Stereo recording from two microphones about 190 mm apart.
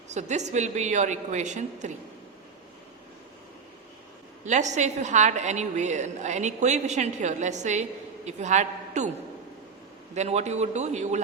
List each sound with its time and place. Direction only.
0.1 s a woman's voice: 35° right (ahead or behind)
4.4 s a woman's voice: 40° right (ahead or behind)
10.2 s a woman's voice: 35° right (ahead or behind)